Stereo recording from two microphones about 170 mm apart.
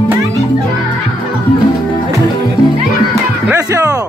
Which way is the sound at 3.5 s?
20° right (ahead or behind).